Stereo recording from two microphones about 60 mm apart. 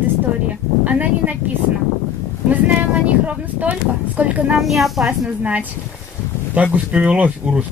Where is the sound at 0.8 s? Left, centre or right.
Right.